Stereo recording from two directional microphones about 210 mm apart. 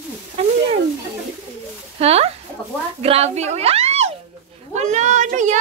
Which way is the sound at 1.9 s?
30° right (ahead or behind).